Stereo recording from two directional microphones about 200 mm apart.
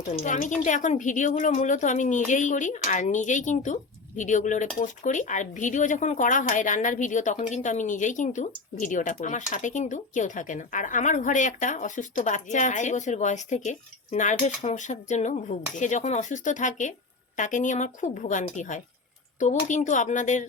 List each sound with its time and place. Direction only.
0.2 s speech: 40° left (ahead or behind)